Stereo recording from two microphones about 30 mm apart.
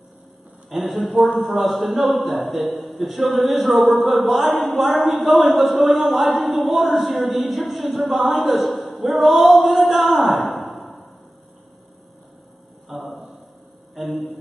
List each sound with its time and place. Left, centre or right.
0.9 s a man's voice: right
1.3 s a woman's voice: centre
12.8 s a sound: centre